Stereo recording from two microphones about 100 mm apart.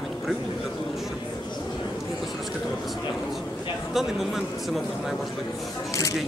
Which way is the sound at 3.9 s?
5° right (ahead or behind).